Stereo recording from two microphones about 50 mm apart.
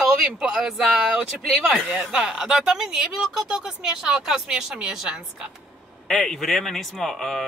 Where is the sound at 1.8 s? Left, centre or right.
Right.